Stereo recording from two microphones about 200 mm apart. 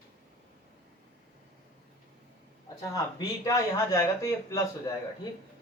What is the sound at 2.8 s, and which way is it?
Speech, 15° left (ahead or behind).